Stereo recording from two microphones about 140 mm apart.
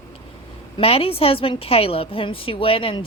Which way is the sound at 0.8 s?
45° left (ahead or behind).